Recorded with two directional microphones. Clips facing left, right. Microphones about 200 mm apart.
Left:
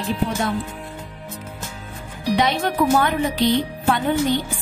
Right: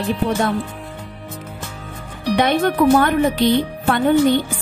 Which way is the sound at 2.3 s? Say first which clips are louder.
Right 4 dB; 55° right (ahead or behind).